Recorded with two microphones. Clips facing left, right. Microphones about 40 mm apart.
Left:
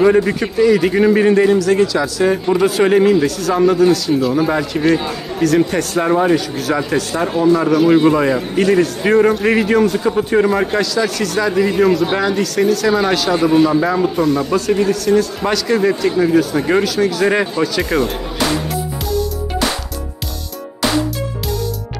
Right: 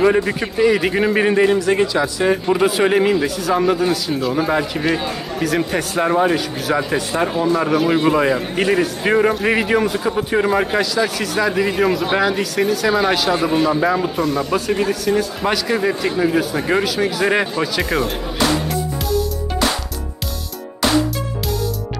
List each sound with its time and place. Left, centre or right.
0.0 s a man's voice: centre
7.0 s a man's voice: centre
7.2 s a man's voice: centre